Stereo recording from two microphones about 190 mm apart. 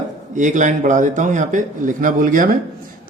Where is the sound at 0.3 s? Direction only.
40° right (ahead or behind).